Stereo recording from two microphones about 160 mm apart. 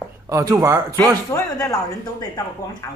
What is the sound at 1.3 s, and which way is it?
Speech, 20° left (ahead or behind).